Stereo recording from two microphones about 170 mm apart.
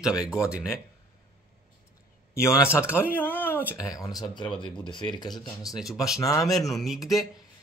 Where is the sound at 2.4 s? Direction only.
15° left (ahead or behind).